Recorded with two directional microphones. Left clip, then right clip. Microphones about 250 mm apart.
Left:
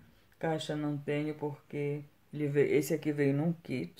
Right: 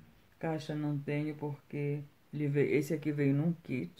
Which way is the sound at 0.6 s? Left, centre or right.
Centre.